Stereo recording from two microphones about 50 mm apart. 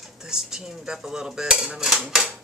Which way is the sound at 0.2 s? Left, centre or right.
Centre.